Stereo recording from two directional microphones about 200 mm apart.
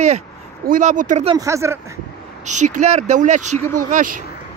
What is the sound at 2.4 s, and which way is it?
Speech, 35° right (ahead or behind).